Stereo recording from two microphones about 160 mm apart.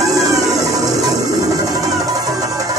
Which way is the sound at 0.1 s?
20° right (ahead or behind).